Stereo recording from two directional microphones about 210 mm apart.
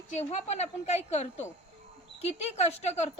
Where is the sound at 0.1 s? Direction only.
30° left (ahead or behind).